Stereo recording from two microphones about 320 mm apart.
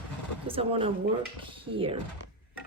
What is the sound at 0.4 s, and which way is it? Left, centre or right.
A woman's voice, centre.